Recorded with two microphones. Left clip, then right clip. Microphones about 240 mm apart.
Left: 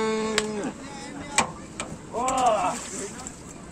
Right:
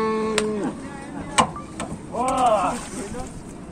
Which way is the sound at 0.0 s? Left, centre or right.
Left.